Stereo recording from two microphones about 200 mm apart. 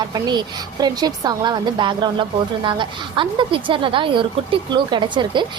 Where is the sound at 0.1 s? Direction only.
20° right (ahead or behind).